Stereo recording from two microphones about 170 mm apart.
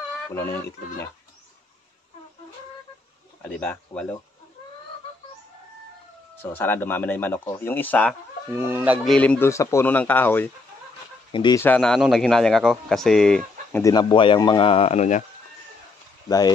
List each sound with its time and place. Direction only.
0.3 s speech: 15° left (ahead or behind)
3.4 s speech: 10° left (ahead or behind)
6.3 s speech: 10° left (ahead or behind)
8.6 s speech: 10° right (ahead or behind)
9.0 s speech: 5° left (ahead or behind)
11.3 s speech: 25° left (ahead or behind)
11.6 s speech: 5° left (ahead or behind)
13.8 s speech: 25° left (ahead or behind); by 15.2 s 45° left (ahead or behind)
16.3 s speech: 20° left (ahead or behind)